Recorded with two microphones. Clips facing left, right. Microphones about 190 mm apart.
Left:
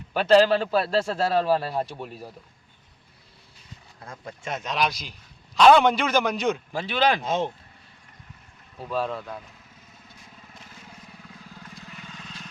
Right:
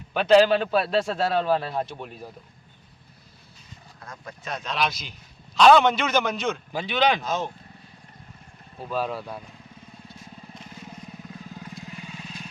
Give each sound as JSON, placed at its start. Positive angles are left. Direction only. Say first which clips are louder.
{"t": 0.1, "sound": "a man's voice", "louder": "right 1 dB", "side_deg": 0}
{"t": 4.0, "sound": "a man's voice", "louder": "left 2 dB", "side_deg": 30}
{"t": 6.7, "sound": "a man's voice", "louder": "right 3 dB", "side_deg": 0}
{"t": 7.2, "sound": "speech", "louder": "left 2 dB", "side_deg": 25}
{"t": 8.8, "sound": "a man's voice", "louder": "even", "side_deg": 0}
{"t": 11.5, "sound": "vehicle", "louder": "right 3 dB", "side_deg": -15}